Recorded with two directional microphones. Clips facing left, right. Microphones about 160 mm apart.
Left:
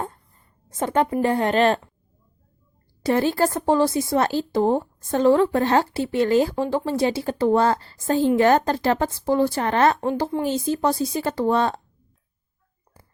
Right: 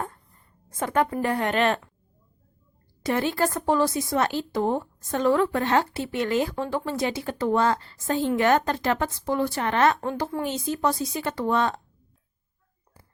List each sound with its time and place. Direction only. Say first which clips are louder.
0.7 s speech: left 3 dB; 25° left (ahead or behind)
3.0 s speech: left 4 dB; 35° left (ahead or behind)